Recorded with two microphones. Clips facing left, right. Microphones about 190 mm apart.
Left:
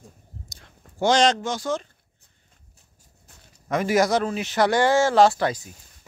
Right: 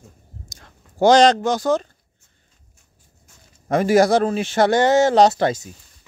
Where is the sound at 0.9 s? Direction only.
40° right (ahead or behind).